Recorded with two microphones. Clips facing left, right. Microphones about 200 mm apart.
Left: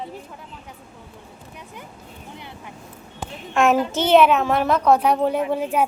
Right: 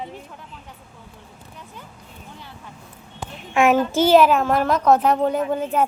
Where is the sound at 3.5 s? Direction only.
Centre (ahead or behind).